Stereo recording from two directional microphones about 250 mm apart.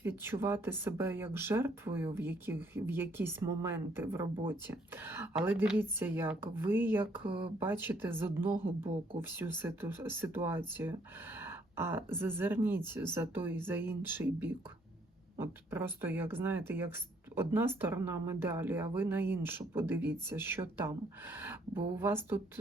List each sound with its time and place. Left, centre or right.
0.0 s speech: centre